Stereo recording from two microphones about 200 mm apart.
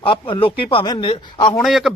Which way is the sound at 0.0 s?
25° left (ahead or behind).